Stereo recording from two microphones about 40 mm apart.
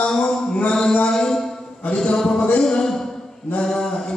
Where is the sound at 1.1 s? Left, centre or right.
Centre.